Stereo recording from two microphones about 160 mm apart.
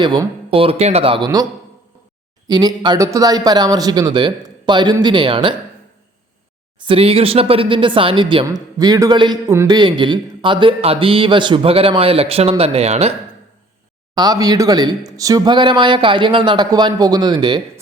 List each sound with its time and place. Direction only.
0.0 s a man's voice: 30° right (ahead or behind)
2.5 s speech: 25° right (ahead or behind)
6.8 s a man's voice: 35° right (ahead or behind)
14.2 s speech: 25° right (ahead or behind)